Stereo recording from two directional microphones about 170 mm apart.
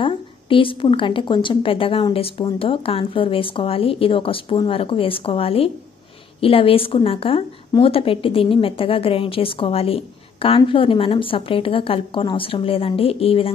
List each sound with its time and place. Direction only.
0.0 s a woman's voice: 30° left (ahead or behind)